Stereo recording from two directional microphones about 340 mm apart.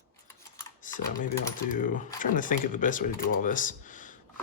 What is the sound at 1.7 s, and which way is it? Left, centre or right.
Speech, left.